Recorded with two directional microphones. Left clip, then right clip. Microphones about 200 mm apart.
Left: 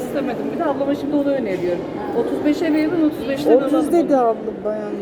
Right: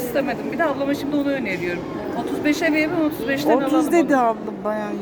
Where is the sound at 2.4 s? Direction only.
40° right (ahead or behind).